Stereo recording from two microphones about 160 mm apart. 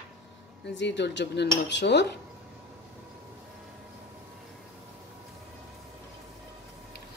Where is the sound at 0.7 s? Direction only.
90° left.